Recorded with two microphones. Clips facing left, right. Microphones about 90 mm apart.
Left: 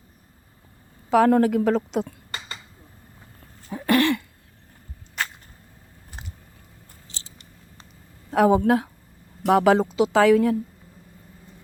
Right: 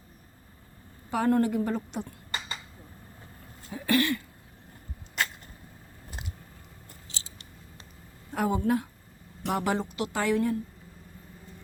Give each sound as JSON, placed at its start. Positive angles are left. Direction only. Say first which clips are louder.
{"t": 1.1, "sound": "speech", "louder": "left 7 dB", "side_deg": 90}
{"t": 3.7, "sound": "cough", "louder": "left 6 dB", "side_deg": 65}
{"t": 8.3, "sound": "speech", "louder": "left 9 dB", "side_deg": 90}